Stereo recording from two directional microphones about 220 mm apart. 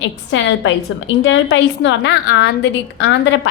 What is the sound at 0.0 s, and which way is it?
A woman's voice, 60° left (ahead or behind).